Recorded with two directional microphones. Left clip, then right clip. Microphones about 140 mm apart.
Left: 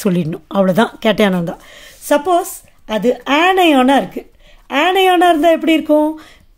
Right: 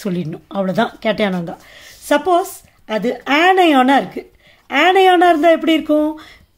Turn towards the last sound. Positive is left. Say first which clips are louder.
# left 3 dB
turn(degrees=20)  # may be behind; listen again after turning